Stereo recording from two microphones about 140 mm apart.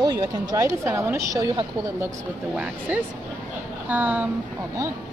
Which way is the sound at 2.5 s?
10° right (ahead or behind).